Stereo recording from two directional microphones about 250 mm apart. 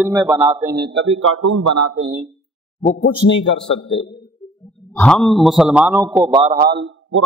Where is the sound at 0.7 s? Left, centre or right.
Right.